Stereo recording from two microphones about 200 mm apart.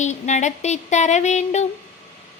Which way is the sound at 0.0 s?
35° left (ahead or behind).